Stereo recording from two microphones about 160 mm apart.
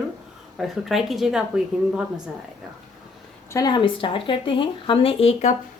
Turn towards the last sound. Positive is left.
turn(degrees=40)  # may be behind; listen again after turning